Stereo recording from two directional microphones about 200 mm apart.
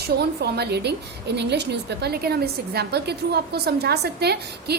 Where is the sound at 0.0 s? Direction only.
55° right (ahead or behind).